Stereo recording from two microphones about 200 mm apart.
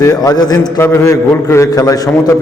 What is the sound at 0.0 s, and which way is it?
A man's voice, 15° left (ahead or behind).